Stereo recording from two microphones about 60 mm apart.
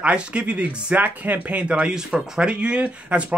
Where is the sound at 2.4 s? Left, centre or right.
Centre.